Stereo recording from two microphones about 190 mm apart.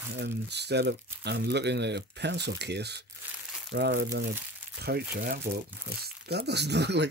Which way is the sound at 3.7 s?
75° right (ahead or behind).